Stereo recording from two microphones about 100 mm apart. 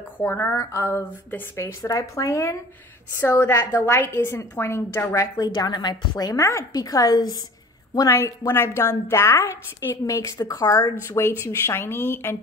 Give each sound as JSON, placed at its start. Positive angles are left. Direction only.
{"t": 0.2, "sound": "a woman's voice", "side_deg": 25}
{"t": 5.5, "sound": "a woman's voice", "side_deg": 45}
{"t": 8.2, "sound": "a woman's voice", "side_deg": 25}